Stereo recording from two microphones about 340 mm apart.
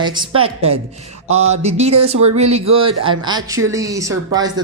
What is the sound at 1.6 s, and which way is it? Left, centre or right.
Speech, centre.